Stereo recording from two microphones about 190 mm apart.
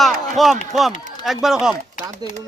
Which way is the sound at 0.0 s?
Centre (ahead or behind).